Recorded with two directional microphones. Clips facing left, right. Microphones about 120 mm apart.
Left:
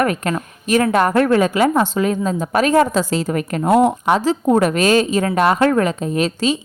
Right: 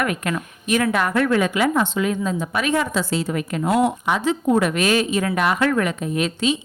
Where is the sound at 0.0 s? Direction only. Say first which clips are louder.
Left 5 dB; 35° left (ahead or behind).